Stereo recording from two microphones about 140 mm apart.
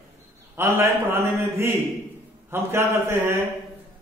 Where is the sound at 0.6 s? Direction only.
15° right (ahead or behind).